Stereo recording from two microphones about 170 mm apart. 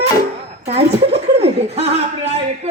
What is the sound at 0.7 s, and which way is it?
Speech, 35° right (ahead or behind).